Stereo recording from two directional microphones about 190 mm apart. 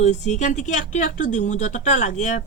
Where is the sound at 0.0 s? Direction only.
40° left (ahead or behind).